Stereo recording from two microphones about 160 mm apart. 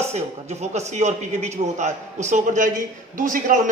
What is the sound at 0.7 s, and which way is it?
A man's voice, 45° right (ahead or behind).